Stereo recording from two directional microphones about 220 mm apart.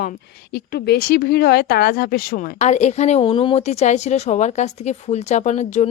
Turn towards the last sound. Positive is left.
turn(degrees=30)  # may be behind; listen again after turning